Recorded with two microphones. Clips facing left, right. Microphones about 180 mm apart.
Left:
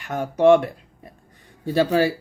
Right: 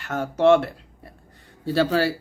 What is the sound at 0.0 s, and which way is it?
Mantra, 15° left (ahead or behind).